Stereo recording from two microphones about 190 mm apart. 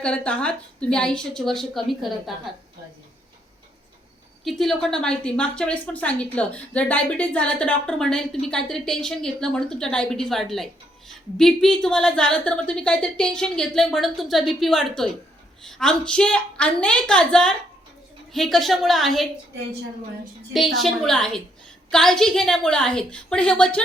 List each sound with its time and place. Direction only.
0.0 s a woman's voice: 5° left (ahead or behind)
4.4 s a woman's voice: centre (ahead or behind)
20.5 s a woman's voice: centre (ahead or behind)